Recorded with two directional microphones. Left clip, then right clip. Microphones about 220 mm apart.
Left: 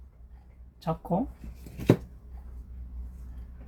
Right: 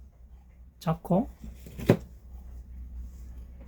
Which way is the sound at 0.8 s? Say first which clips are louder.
Right 1 dB; 60° right (ahead or behind).